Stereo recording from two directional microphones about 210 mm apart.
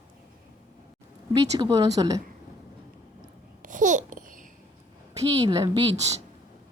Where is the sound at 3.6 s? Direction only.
40° right (ahead or behind).